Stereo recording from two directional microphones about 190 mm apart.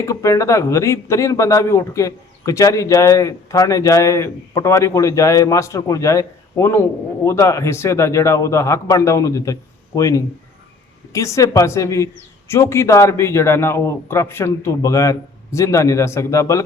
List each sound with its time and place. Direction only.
0.0 s speech: 15° left (ahead or behind)